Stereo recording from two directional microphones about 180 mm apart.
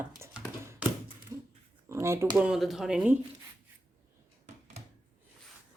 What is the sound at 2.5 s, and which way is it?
Speech, centre (ahead or behind).